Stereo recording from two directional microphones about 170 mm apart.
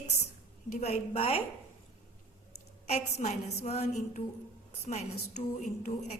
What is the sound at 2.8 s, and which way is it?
A woman's voice, 40° left (ahead or behind).